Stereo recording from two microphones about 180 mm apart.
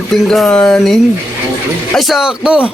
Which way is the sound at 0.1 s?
Centre (ahead or behind).